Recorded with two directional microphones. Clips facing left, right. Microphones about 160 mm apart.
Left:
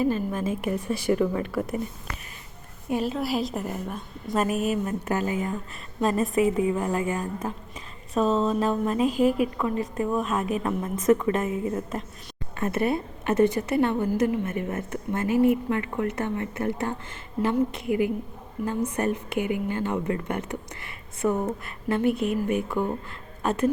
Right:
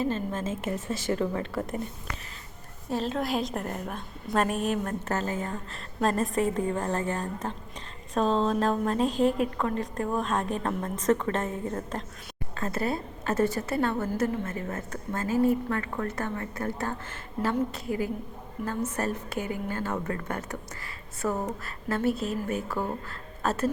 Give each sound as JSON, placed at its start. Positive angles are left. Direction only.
{"t": 0.0, "sound": "a woman's voice", "side_deg": 10}
{"t": 2.9, "sound": "a woman's voice", "side_deg": 10}
{"t": 12.5, "sound": "a woman's voice", "side_deg": 20}
{"t": 19.5, "sound": "a woman's voice", "side_deg": -45}
{"t": 20.1, "sound": "a woman's voice", "side_deg": 20}
{"t": 21.2, "sound": "a woman's voice", "side_deg": 5}
{"t": 23.4, "sound": "speech", "side_deg": 15}